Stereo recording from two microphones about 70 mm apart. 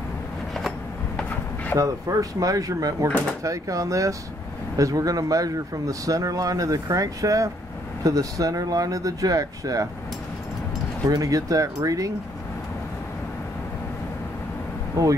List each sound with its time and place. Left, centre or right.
1.8 s speech: right
11.1 s speech: right
15.0 s speech: right